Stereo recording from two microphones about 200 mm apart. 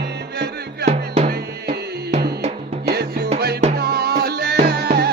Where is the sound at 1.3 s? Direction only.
55° right (ahead or behind).